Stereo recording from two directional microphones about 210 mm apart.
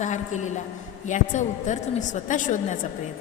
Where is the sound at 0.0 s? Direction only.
35° left (ahead or behind).